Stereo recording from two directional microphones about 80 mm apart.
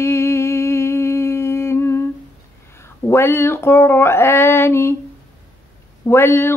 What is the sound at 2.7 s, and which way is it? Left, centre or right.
Speech, left.